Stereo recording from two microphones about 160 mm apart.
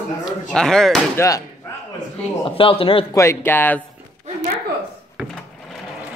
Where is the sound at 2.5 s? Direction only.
35° left (ahead or behind).